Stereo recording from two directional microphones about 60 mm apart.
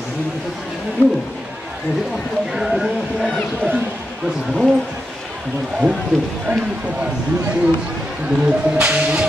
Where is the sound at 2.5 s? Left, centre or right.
Centre.